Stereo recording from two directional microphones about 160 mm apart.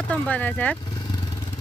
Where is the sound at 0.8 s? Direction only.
25° left (ahead or behind).